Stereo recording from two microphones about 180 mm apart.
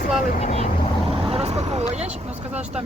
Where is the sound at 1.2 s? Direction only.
35° right (ahead or behind).